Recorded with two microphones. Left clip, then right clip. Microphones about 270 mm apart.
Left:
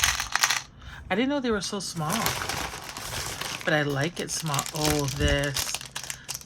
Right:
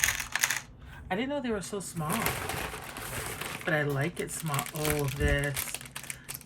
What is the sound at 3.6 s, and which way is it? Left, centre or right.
Speech, centre.